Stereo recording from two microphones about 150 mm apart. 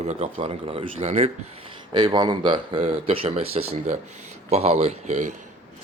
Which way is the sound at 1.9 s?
30° right (ahead or behind).